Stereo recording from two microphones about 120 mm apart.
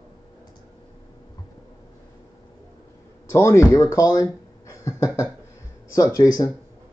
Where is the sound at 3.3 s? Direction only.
25° left (ahead or behind).